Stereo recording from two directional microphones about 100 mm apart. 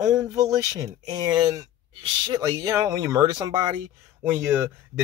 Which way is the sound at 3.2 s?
45° right (ahead or behind).